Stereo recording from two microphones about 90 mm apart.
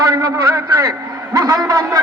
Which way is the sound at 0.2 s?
40° right (ahead or behind).